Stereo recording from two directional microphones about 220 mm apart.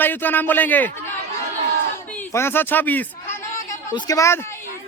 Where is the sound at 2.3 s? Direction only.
10° left (ahead or behind).